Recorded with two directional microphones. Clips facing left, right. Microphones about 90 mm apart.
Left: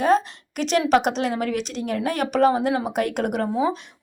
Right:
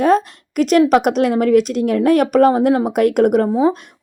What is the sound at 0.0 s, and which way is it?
A woman's voice, 50° right (ahead or behind).